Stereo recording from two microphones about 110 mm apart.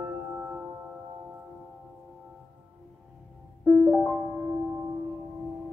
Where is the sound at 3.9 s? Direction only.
20° right (ahead or behind).